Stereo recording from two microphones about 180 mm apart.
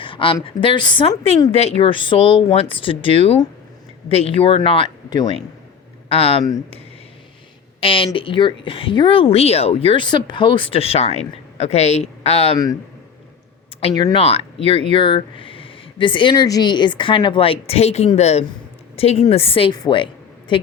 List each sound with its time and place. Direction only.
0.0 s a sound: 30° left (ahead or behind)
0.4 s speech: 25° left (ahead or behind)
7.8 s speech: 30° left (ahead or behind)
14.0 s a woman's voice: 30° left (ahead or behind)